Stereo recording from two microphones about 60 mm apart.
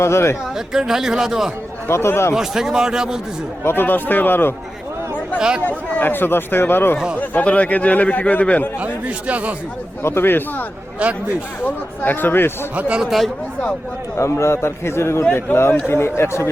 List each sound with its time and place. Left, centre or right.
0.0 s a man's voice: left
0.5 s speech: centre
1.9 s a man's voice: left
2.3 s speech: centre
3.6 s speech: left
5.4 s speech: centre
5.6 s speech: left
7.2 s a man's voice: left
8.8 s speech: right
10.0 s speech: left
11.0 s speech: centre
11.6 s speech: left
13.0 s speech: centre
14.2 s a man's voice: left